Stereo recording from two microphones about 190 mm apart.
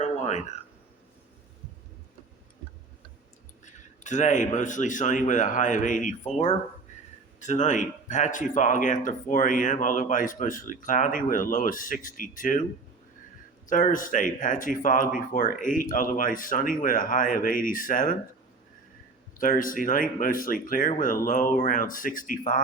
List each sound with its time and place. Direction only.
0.0 s a sound: 35° left (ahead or behind)
3.7 s speech: 40° left (ahead or behind)
13.7 s speech: 45° left (ahead or behind)
19.4 s speech: 45° left (ahead or behind)